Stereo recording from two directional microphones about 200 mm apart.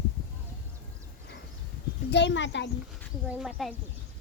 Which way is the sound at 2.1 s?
60° left (ahead or behind).